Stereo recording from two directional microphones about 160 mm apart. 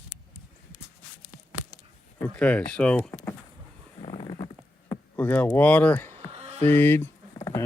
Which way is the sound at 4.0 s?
35° left (ahead or behind).